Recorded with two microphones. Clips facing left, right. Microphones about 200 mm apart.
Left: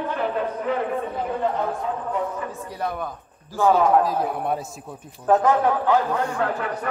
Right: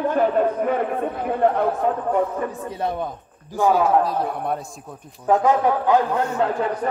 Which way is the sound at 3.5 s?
15° right (ahead or behind).